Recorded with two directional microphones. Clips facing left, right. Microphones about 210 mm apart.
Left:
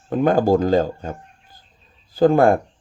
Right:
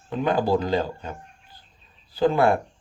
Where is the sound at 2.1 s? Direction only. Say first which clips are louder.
Left 5 dB; 45° left (ahead or behind).